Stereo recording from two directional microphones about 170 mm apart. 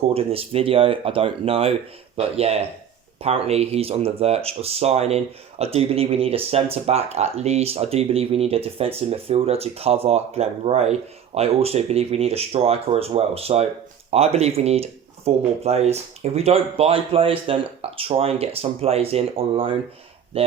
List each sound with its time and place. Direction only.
0.1 s speech: 35° right (ahead or behind)